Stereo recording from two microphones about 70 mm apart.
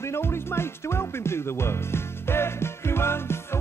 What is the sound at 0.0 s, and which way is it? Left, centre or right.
Music, left.